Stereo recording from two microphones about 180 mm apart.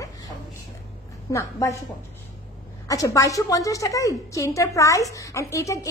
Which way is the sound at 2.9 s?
20° left (ahead or behind).